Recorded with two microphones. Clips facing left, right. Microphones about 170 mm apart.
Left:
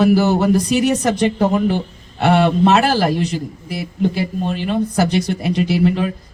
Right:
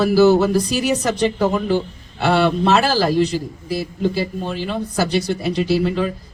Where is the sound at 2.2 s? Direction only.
20° left (ahead or behind).